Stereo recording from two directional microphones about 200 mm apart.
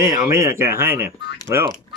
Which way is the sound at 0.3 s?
15° right (ahead or behind).